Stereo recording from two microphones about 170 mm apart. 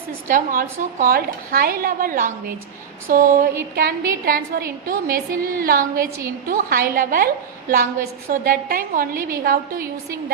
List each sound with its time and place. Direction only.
0.3 s a woman's voice: 55° right (ahead or behind)
3.1 s a sound: 50° right (ahead or behind)
3.8 s a woman's voice: 60° right (ahead or behind)